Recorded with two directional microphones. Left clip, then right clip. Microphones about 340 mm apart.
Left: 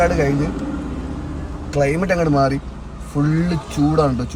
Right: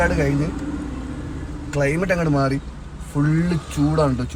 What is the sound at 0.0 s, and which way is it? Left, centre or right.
Speech, centre.